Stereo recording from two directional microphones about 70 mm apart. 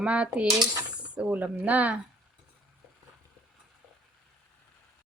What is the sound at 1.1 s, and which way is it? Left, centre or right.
Speech, right.